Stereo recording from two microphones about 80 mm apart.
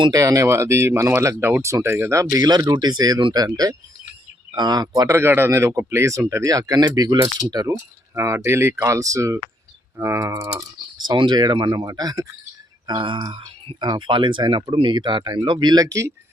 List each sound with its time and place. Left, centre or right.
0.1 s speech: right
3.3 s speech: right
5.0 s speech: right
8.1 s speech: right
10.9 s speech: right
13.0 s speech: right
13.3 s speech: right